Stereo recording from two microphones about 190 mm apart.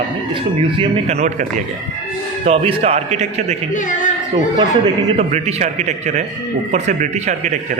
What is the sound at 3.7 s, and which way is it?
Speech, 40° left (ahead or behind).